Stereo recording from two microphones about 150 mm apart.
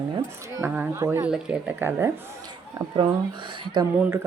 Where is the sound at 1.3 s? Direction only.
10° right (ahead or behind).